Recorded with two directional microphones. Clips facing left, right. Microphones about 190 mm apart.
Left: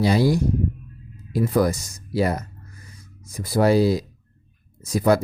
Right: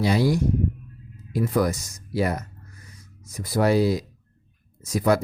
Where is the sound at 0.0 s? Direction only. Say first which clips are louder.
Left 2 dB; 35° left (ahead or behind).